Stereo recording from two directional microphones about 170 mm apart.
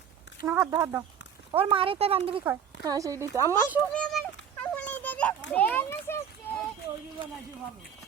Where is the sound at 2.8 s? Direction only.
20° right (ahead or behind).